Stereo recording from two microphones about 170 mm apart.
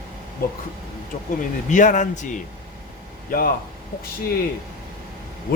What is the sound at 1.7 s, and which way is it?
Speech, 50° left (ahead or behind).